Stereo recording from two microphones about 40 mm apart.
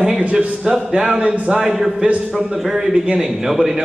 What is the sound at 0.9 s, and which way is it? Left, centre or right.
A man's voice, centre.